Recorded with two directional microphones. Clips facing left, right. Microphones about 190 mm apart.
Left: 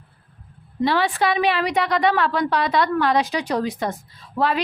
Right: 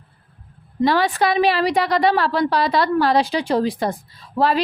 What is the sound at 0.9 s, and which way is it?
Speech, 40° right (ahead or behind).